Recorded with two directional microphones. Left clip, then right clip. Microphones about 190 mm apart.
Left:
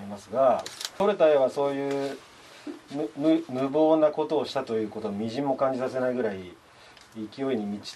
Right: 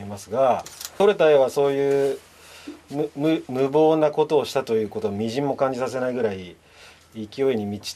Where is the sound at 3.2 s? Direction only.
30° right (ahead or behind).